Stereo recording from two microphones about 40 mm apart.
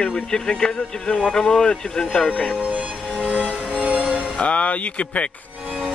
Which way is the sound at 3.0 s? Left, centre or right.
Left.